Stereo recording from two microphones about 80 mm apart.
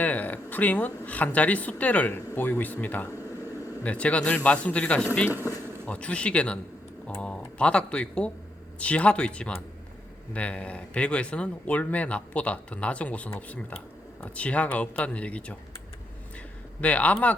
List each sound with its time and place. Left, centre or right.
0.0 s speech: left
5.3 s a sound: right
5.8 s speech: centre
16.8 s speech: centre